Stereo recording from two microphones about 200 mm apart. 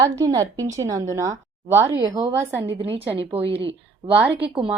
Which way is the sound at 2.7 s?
30° right (ahead or behind).